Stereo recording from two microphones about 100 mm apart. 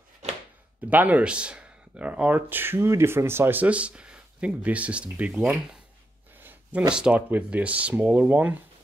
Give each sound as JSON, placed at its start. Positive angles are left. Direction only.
{"t": 0.8, "sound": "speech", "side_deg": -15}
{"t": 6.9, "sound": "speech", "side_deg": -10}